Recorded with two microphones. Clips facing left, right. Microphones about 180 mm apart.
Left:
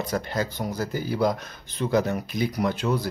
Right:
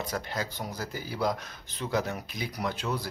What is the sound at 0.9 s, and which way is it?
Speech, 55° left (ahead or behind).